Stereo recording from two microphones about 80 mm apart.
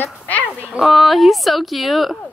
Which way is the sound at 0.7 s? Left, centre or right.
Centre.